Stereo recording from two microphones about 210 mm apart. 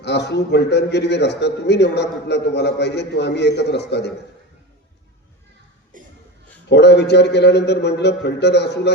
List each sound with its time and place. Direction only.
0.0 s a man's voice: 55° left (ahead or behind)
6.7 s a man's voice: 55° left (ahead or behind)